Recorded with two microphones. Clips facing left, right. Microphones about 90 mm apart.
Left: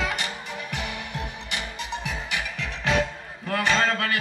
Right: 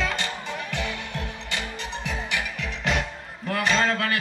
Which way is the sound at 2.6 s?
45° left (ahead or behind).